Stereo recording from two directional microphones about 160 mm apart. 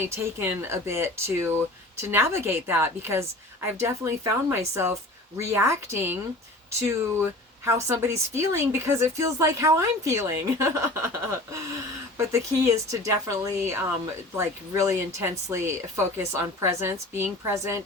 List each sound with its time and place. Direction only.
0.0 s speech: 15° right (ahead or behind)
7.6 s speech: 15° right (ahead or behind)